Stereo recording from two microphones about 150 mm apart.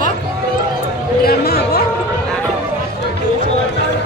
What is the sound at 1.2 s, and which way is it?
Speech, 90° left.